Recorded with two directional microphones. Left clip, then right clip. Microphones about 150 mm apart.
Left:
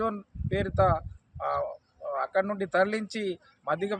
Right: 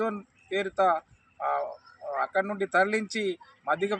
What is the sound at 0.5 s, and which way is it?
Speech, 35° left (ahead or behind).